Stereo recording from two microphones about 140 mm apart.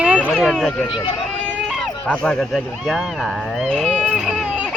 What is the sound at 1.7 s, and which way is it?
Speech, centre (ahead or behind).